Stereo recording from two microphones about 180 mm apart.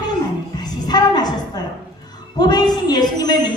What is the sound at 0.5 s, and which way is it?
Speech, 20° left (ahead or behind).